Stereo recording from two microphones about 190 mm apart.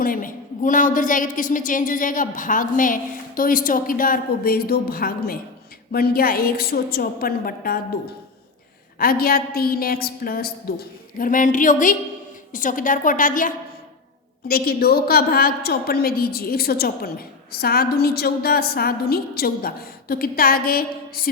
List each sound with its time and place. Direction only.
0.0 s a woman's voice: 45° left (ahead or behind)
9.0 s a woman's voice: 50° left (ahead or behind)